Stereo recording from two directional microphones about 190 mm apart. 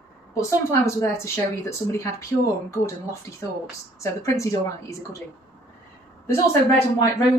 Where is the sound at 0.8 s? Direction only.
15° left (ahead or behind).